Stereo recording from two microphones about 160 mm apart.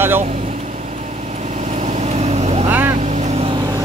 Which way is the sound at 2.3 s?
40° right (ahead or behind).